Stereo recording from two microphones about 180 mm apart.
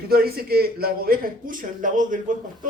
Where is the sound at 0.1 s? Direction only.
60° right (ahead or behind).